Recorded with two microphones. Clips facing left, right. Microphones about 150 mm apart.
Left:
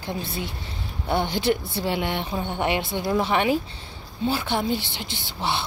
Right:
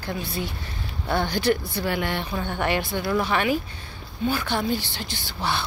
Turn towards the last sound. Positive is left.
turn(degrees=25)  # may be behind; listen again after turning